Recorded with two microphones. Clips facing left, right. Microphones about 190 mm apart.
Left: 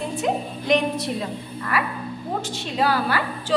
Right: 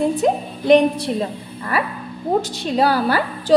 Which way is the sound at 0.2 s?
35° right (ahead or behind).